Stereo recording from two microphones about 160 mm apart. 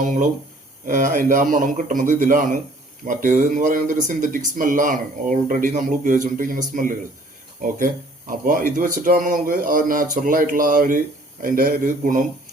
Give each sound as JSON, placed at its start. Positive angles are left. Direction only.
{"t": 0.0, "sound": "speech", "side_deg": -50}
{"t": 8.3, "sound": "speech", "side_deg": -55}